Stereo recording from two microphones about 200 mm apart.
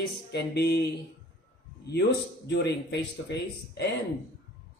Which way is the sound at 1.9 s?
55° left (ahead or behind).